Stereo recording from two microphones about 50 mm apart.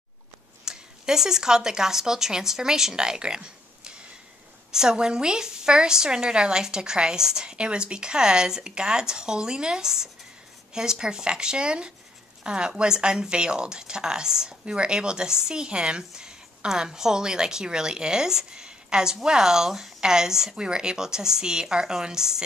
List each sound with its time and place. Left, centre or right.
0.7 s a woman's voice: centre